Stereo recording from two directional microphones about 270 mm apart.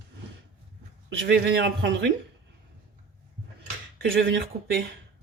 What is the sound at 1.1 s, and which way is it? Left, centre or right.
A woman's voice, right.